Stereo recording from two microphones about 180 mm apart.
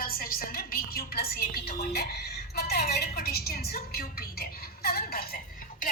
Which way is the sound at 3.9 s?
60° left (ahead or behind).